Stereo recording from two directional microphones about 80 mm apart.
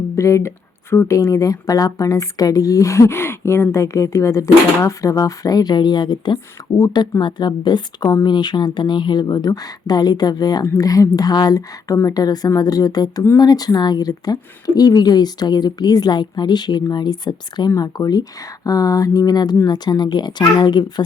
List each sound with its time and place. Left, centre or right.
0.2 s speech: left
6.7 s speech: left
7.2 s a woman's voice: left
17.7 s speech: left